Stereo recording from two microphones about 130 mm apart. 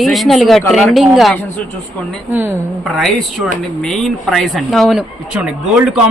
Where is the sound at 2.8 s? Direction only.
Centre (ahead or behind).